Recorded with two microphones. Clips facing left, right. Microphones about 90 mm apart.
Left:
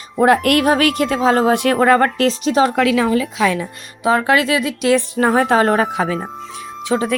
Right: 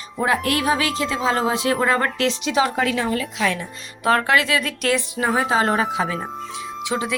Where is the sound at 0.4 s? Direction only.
55° left (ahead or behind); by 2.7 s 40° left (ahead or behind).